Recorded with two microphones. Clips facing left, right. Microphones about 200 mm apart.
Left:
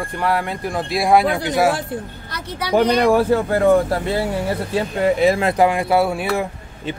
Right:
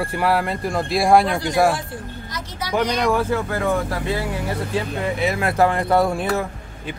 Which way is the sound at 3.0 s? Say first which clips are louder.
Left 5 dB; 35° left (ahead or behind).